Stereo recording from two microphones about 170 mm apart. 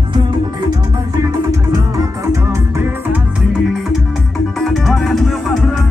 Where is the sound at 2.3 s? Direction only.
15° right (ahead or behind).